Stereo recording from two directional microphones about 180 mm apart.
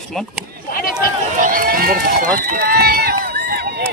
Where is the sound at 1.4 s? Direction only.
50° right (ahead or behind).